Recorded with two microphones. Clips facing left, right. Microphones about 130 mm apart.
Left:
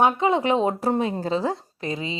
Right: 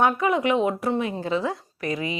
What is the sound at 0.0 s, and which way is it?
A woman's voice, 25° left (ahead or behind).